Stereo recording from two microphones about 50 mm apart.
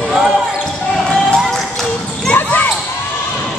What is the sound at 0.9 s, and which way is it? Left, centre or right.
Basketball bounce, centre.